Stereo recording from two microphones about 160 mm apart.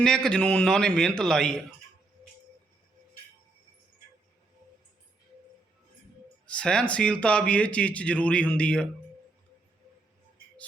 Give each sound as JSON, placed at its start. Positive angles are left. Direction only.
{"t": 0.0, "sound": "a man's voice", "side_deg": 5}
{"t": 6.5, "sound": "speech", "side_deg": 5}